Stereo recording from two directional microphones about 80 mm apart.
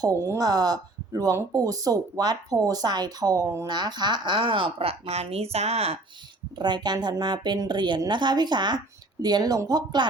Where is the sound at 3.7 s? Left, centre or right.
Right.